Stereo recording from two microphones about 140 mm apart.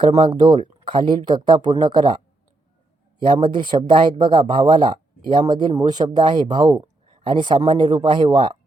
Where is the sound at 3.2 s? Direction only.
35° right (ahead or behind).